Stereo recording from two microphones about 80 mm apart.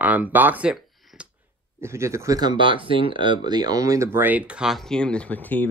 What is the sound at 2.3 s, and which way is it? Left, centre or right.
Speech, right.